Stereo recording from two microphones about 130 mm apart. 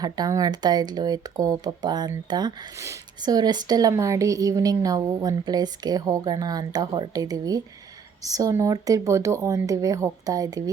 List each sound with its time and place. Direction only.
0.0 s speech: 30° right (ahead or behind)